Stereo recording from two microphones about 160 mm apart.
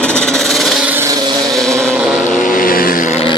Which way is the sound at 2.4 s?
60° left (ahead or behind).